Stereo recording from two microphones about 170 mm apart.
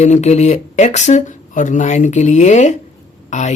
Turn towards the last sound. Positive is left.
turn(degrees=45)  # may be behind; listen again after turning